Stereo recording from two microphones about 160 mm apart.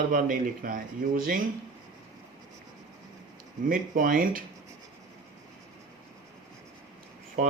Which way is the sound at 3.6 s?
60° right (ahead or behind).